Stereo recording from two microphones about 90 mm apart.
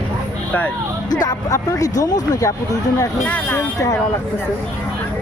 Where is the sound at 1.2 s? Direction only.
40° left (ahead or behind).